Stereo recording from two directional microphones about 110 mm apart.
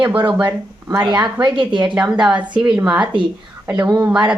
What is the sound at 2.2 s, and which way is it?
Speech, 10° right (ahead or behind).